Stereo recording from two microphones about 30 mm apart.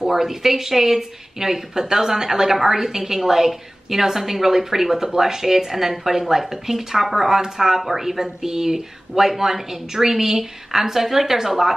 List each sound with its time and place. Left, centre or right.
0.0 s a woman's voice: centre